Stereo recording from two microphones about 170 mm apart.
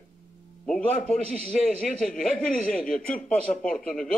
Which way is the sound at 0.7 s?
5° left (ahead or behind).